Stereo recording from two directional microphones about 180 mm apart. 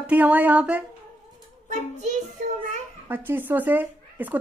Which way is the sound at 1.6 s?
40° right (ahead or behind).